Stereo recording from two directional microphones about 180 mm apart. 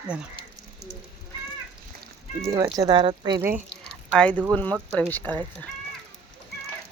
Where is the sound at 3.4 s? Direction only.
10° right (ahead or behind).